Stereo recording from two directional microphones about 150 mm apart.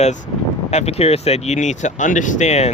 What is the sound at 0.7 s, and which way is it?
Speech, 45° left (ahead or behind).